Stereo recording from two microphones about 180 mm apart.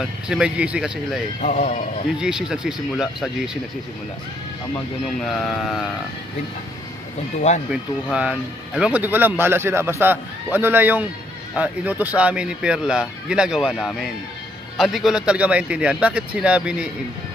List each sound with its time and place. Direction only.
0.0 s speech: 5° right (ahead or behind)
1.4 s a man's voice: 40° left (ahead or behind)
2.1 s speech: 5° right (ahead or behind)
5.2 s speech: centre (ahead or behind)
7.3 s speech: 40° left (ahead or behind)
7.7 s speech: 5° right (ahead or behind)